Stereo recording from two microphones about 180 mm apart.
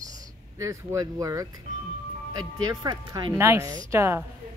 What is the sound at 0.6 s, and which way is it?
Speech, 15° right (ahead or behind).